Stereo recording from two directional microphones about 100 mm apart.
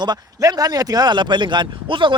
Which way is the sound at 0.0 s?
40° right (ahead or behind).